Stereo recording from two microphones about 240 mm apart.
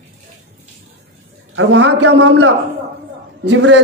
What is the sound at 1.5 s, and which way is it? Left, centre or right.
A man's voice, right.